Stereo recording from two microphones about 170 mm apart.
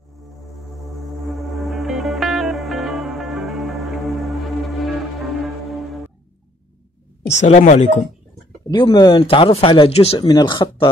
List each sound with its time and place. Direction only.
0.8 s music: centre (ahead or behind)
7.2 s speech: 45° left (ahead or behind)
8.6 s speech: 25° left (ahead or behind)